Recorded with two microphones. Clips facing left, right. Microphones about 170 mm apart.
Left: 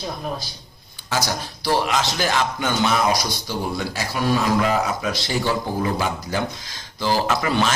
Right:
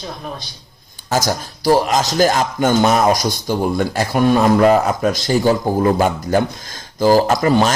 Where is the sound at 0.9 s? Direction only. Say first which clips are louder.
Right 6 dB; 45° right (ahead or behind).